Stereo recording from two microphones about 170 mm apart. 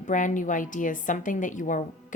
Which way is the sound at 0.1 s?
50° left (ahead or behind).